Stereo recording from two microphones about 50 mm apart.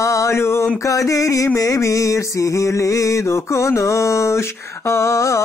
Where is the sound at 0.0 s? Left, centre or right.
Left.